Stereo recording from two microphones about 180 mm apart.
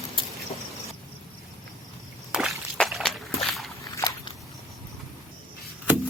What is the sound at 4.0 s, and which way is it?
Biting, 20° left (ahead or behind).